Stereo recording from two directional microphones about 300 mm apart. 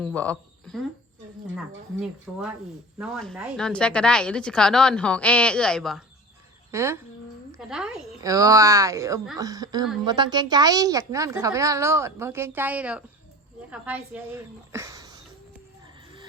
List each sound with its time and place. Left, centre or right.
0.0 s a woman's voice: centre
6.7 s a woman's voice: centre